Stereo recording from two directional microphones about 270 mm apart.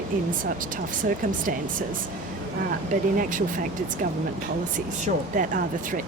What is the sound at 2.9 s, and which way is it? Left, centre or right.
Speech, right.